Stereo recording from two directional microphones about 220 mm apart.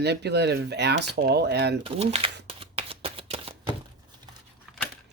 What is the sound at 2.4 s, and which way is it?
Shuffling cards, 25° right (ahead or behind).